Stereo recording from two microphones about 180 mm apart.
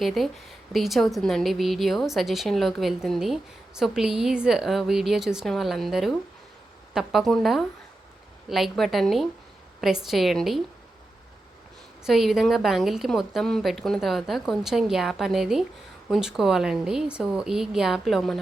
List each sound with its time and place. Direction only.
0.0 s a woman's voice: centre (ahead or behind)
12.0 s a woman's voice: centre (ahead or behind)